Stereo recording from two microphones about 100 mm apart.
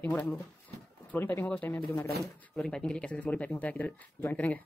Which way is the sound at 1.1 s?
20° left (ahead or behind).